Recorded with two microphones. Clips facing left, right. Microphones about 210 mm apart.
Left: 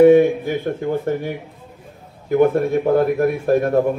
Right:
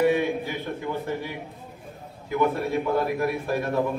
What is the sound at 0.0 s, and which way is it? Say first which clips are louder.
A man's voice: left 11 dB; 50° left (ahead or behind).